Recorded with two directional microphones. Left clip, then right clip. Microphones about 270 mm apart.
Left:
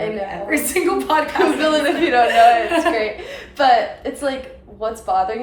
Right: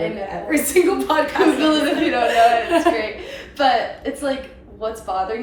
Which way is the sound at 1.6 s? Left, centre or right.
Centre.